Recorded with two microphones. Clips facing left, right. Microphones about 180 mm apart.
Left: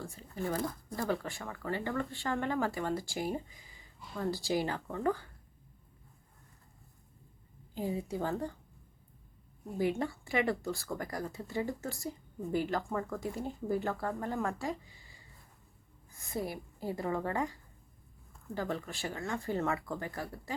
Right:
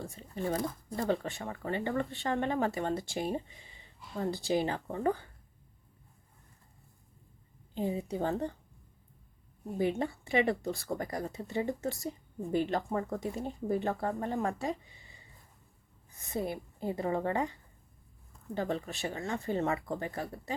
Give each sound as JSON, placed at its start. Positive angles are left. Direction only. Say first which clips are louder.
{"t": 0.0, "sound": "speech", "louder": "right 2 dB", "side_deg": -20}
{"t": 7.8, "sound": "speech", "louder": "right 2 dB", "side_deg": -20}
{"t": 9.7, "sound": "speech", "louder": "right 1 dB", "side_deg": -20}